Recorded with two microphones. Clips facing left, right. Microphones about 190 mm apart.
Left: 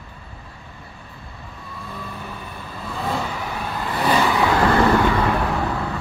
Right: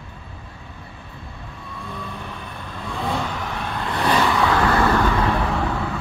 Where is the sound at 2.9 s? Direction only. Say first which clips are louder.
Even; centre (ahead or behind).